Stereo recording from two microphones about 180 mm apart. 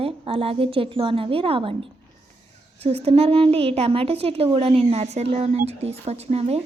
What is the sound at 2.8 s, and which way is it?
Speech, 35° right (ahead or behind).